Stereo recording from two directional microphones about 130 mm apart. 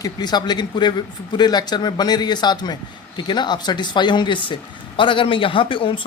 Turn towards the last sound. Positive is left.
turn(degrees=40)  # may be behind; listen again after turning